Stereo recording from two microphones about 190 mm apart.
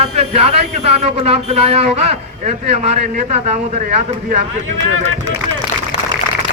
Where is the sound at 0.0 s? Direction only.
35° right (ahead or behind).